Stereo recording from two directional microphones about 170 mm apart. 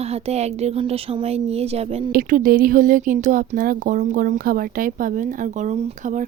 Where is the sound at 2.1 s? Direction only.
60° right (ahead or behind).